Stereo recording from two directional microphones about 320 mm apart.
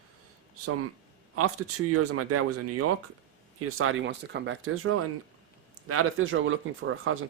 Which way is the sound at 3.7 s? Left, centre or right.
Right.